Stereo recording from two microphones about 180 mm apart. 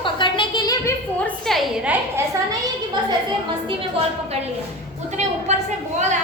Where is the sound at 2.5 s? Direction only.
25° right (ahead or behind).